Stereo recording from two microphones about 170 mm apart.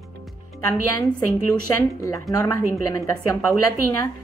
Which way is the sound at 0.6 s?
20° left (ahead or behind).